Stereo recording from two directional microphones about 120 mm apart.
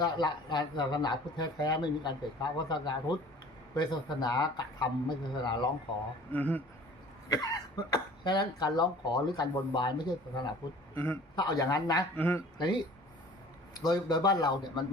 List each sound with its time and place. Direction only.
0.0 s speech: 35° left (ahead or behind)
4.2 s speech: 35° left (ahead or behind)
6.3 s speech: 15° left (ahead or behind)
7.3 s speech: 30° left (ahead or behind)
10.9 s a man's voice: 20° left (ahead or behind)
11.3 s speech: 35° left (ahead or behind)
12.1 s speech: 15° left (ahead or behind)
12.5 s speech: 35° left (ahead or behind)